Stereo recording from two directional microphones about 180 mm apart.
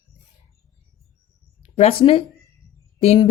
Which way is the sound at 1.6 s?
35° left (ahead or behind).